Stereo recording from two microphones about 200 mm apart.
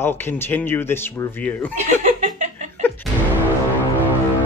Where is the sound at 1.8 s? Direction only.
35° right (ahead or behind).